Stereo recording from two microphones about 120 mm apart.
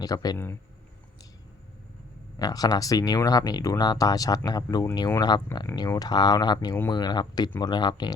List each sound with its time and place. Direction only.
0.0 s speech: 35° left (ahead or behind)
0.3 s speech: 20° left (ahead or behind)
2.4 s speech: 30° left (ahead or behind)